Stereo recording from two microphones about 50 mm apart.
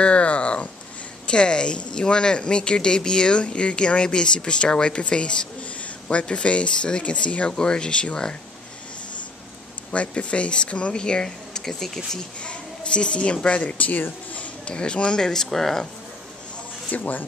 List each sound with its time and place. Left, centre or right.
0.0 s a sound: left
1.2 s speech: centre
9.8 s speech: left
12.4 s a woman's voice: left
14.6 s speech: centre
16.9 s speech: left